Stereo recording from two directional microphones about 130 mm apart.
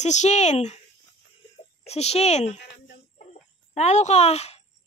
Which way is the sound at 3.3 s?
60° left (ahead or behind).